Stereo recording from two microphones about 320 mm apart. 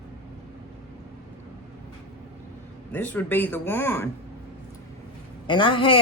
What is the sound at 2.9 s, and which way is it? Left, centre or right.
Speech, centre.